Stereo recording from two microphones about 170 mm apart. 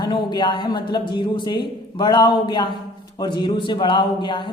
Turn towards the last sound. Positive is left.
turn(degrees=30)  # may be behind; listen again after turning